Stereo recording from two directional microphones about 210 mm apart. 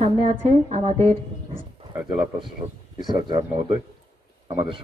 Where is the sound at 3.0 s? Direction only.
20° right (ahead or behind).